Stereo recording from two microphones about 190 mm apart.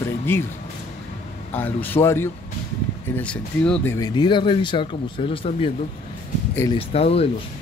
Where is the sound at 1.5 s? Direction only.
10° left (ahead or behind).